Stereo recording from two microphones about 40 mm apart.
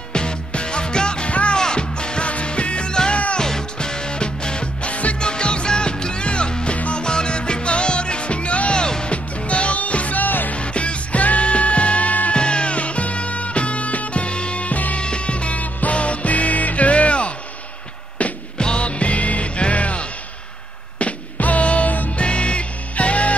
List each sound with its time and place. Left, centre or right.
0.1 s music: left
9.1 s music: left
10.5 s music: left
12.4 s music: left
15.0 s music: left
22.1 s music: left